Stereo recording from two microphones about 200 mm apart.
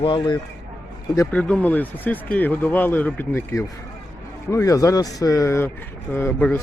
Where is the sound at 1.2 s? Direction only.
5° left (ahead or behind).